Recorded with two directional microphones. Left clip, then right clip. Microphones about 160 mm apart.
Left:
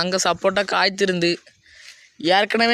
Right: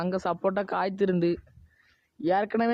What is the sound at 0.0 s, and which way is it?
Speech, 10° left (ahead or behind).